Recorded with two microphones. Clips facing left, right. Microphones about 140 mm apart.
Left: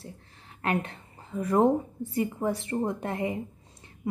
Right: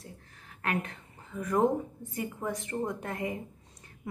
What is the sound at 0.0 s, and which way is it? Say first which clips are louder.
A woman's voice: left 4 dB; 30° left (ahead or behind).